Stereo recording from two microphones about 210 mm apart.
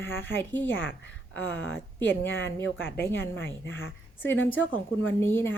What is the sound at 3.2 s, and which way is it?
Speech, 10° left (ahead or behind).